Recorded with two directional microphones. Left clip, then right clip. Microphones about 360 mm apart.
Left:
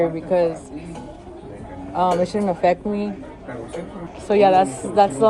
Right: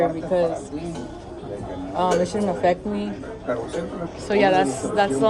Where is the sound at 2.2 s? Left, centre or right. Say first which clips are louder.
Left 2 dB; left.